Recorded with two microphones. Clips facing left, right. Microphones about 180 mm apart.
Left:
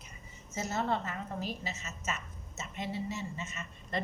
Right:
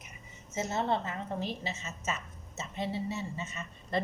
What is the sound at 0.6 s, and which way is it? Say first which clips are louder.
A woman's voice: right 2 dB; 25° right (ahead or behind).